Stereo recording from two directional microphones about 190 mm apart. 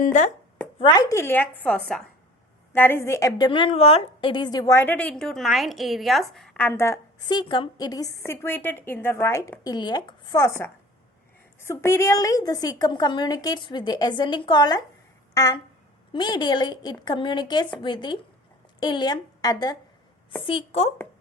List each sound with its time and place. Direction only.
0.0 s speech: 40° left (ahead or behind)
0.8 s a woman's voice: 20° left (ahead or behind)
11.6 s a woman's voice: 15° left (ahead or behind); by 20.9 s 30° left (ahead or behind)